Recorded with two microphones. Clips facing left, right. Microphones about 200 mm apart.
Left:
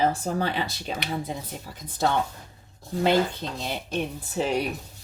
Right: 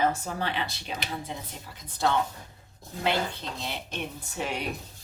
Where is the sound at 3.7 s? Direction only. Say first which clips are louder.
Left 6 dB; 40° left (ahead or behind).